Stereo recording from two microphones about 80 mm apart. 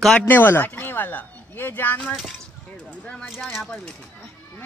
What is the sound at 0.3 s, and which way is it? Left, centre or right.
Speech, left.